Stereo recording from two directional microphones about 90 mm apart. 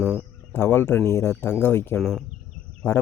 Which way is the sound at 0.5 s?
25° left (ahead or behind).